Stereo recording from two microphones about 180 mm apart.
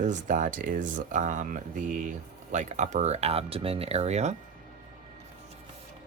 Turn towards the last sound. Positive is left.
turn(degrees=-40)  # may be behind; listen again after turning